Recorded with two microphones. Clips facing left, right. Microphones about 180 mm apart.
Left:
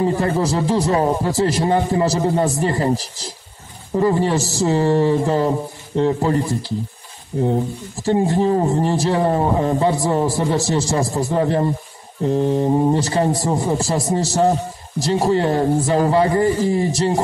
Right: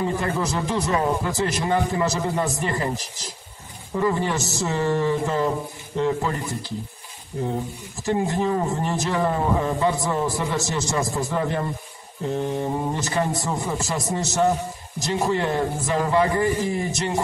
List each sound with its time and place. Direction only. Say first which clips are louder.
0.0 s a man's voice: left 6 dB; 35° left (ahead or behind)
8.0 s a man's voice: left 6 dB; 30° left (ahead or behind)